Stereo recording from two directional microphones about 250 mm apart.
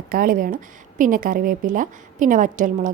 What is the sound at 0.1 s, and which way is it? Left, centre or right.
A woman's voice, right.